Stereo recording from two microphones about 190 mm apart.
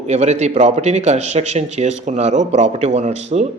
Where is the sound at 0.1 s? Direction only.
35° right (ahead or behind).